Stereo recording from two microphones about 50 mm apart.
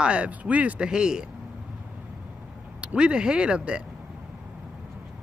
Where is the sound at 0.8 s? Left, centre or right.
Centre.